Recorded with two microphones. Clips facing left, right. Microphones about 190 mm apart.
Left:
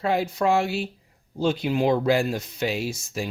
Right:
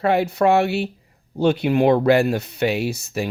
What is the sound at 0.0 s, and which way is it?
Speech, 65° right (ahead or behind).